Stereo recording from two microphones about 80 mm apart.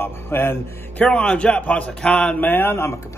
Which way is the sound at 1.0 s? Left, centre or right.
Centre.